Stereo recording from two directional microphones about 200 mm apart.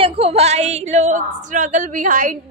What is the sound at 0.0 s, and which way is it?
A woman's voice, 30° right (ahead or behind).